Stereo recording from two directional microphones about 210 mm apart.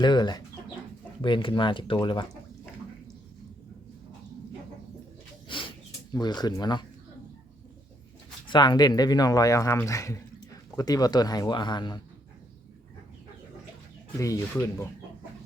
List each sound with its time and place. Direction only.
0.0 s speech: 20° left (ahead or behind)
5.5 s snort: 25° left (ahead or behind)
8.4 s speech: 20° left (ahead or behind)
14.2 s speech: 15° left (ahead or behind)